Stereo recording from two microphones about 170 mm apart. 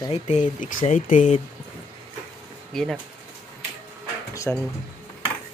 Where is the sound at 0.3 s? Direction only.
45° left (ahead or behind).